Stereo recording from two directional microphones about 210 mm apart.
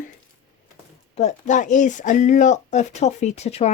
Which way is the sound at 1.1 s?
35° left (ahead or behind).